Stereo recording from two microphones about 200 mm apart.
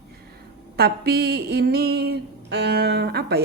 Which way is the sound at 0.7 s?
55° right (ahead or behind).